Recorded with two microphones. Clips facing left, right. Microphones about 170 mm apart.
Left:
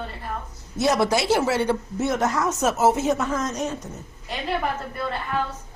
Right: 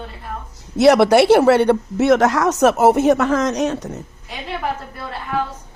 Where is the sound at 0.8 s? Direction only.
70° right (ahead or behind).